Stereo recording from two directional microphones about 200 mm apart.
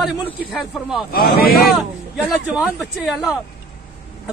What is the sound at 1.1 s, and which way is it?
Speech, 50° left (ahead or behind).